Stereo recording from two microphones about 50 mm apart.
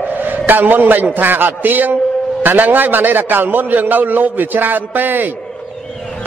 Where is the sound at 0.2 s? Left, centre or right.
Right.